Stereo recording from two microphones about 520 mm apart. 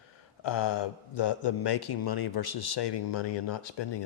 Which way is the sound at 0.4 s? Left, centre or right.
Left.